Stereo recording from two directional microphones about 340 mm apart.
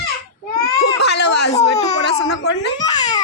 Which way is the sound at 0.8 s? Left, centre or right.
Left.